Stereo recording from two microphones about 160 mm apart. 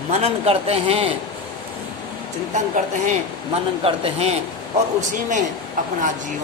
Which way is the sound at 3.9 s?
35° right (ahead or behind).